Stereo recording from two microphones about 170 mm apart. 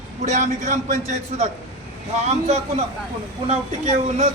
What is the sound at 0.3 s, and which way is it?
A man's voice, 45° right (ahead or behind).